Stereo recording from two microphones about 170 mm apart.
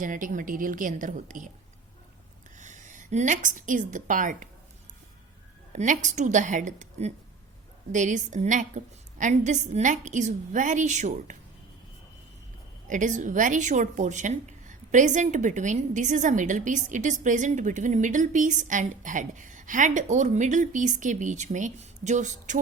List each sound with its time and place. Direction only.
0.0 s a woman's voice: 50° right (ahead or behind)
2.6 s a woman's voice: 45° right (ahead or behind)
5.7 s a woman's voice: 45° right (ahead or behind)
12.9 s a woman's voice: 45° right (ahead or behind)